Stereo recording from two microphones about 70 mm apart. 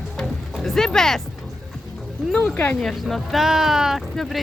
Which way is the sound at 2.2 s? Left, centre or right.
Centre.